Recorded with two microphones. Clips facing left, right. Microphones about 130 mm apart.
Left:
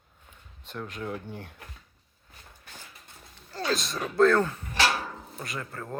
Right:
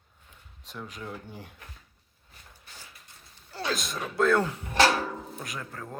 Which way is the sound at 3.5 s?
5° right (ahead or behind).